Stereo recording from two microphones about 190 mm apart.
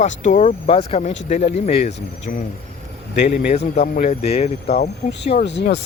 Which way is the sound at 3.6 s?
35° left (ahead or behind).